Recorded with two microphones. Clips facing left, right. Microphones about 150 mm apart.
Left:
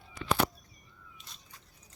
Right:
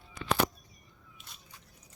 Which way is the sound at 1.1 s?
5° right (ahead or behind).